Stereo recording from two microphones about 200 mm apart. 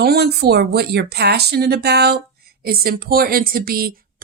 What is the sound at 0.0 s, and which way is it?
Speech, 55° right (ahead or behind).